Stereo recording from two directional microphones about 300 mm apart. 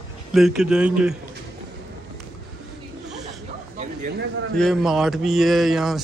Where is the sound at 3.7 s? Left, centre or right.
Right.